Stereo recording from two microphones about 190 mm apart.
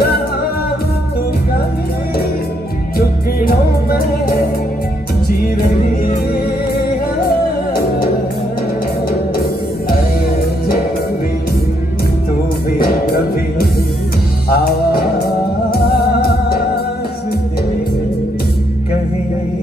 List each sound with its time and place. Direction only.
3.4 s music: 55° left (ahead or behind)
5.6 s music: 45° left (ahead or behind)
12.7 s music: 50° left (ahead or behind)